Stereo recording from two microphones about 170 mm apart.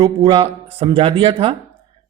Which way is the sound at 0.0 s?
25° right (ahead or behind).